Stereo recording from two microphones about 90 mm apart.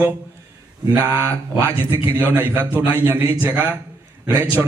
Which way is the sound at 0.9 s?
25° right (ahead or behind).